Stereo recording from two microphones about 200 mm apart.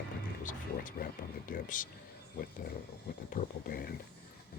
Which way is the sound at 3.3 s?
50° left (ahead or behind).